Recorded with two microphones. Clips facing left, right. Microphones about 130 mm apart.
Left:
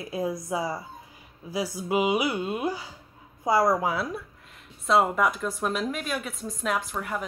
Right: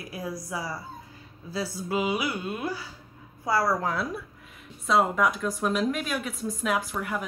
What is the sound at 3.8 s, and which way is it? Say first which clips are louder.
Speech: left 1 dB; centre (ahead or behind).